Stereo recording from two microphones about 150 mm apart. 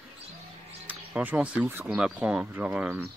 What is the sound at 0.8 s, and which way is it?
Speech, 10° right (ahead or behind).